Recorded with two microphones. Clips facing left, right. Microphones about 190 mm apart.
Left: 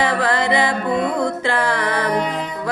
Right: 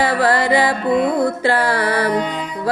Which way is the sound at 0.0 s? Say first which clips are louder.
Right 2 dB; 35° right (ahead or behind).